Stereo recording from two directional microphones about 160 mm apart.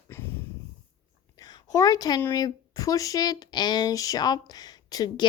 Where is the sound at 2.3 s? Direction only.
20° left (ahead or behind).